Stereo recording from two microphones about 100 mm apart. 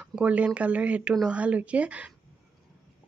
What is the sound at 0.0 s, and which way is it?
Speech, 10° right (ahead or behind).